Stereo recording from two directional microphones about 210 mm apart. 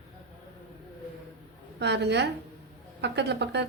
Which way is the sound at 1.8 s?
55° right (ahead or behind).